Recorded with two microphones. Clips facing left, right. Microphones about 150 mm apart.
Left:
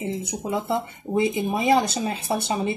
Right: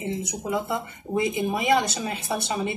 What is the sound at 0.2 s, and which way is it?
Speech, 25° left (ahead or behind).